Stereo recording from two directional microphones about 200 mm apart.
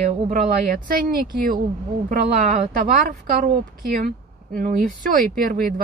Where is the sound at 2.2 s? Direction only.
35° right (ahead or behind).